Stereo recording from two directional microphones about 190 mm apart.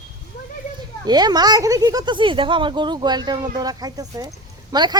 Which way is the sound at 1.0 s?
20° right (ahead or behind).